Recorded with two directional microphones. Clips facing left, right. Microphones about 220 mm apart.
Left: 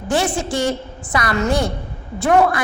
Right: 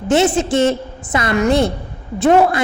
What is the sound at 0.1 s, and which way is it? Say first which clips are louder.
A woman's voice: right 6 dB; 20° right (ahead or behind).